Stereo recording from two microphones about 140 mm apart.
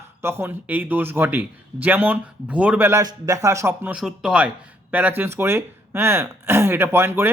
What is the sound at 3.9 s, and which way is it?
Speech, 5° right (ahead or behind).